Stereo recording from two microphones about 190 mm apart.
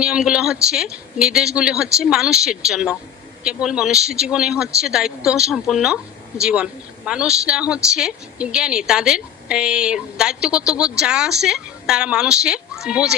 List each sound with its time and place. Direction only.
0.0 s a woman's voice: 5° right (ahead or behind)